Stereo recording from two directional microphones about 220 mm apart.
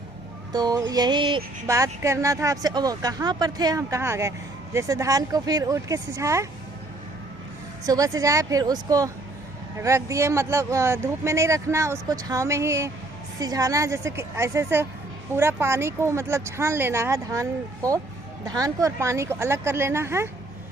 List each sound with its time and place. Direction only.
0.5 s music: 15° right (ahead or behind)
1.6 s speech: 15° right (ahead or behind)
7.9 s speech: 15° right (ahead or behind)